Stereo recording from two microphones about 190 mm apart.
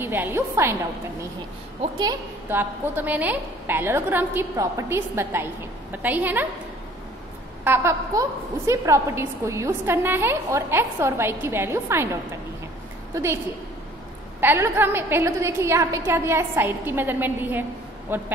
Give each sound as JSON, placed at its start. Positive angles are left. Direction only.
{"t": 0.0, "sound": "a woman's voice", "side_deg": -10}
{"t": 1.8, "sound": "a woman's voice", "side_deg": -20}
{"t": 2.5, "sound": "a woman's voice", "side_deg": -10}
{"t": 7.6, "sound": "a woman's voice", "side_deg": -10}
{"t": 14.4, "sound": "a woman's voice", "side_deg": -10}